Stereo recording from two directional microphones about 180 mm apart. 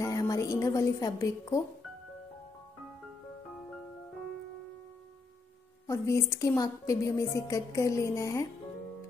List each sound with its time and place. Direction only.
0.0 s music: 20° left (ahead or behind)
5.9 s a woman's voice: 15° left (ahead or behind)